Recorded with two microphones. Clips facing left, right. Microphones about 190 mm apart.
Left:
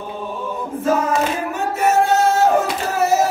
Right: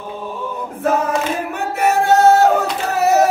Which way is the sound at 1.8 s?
65° right (ahead or behind).